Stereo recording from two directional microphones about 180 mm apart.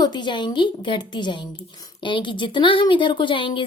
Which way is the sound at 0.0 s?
25° left (ahead or behind).